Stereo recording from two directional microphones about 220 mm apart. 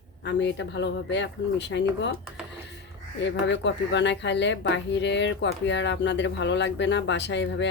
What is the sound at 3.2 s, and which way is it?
Speech, 55° left (ahead or behind).